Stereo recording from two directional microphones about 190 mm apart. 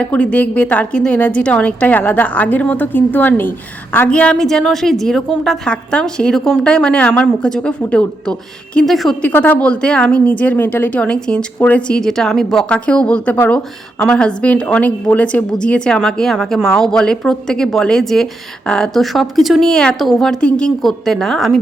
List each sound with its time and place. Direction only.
0.0 s a woman's voice: 5° left (ahead or behind)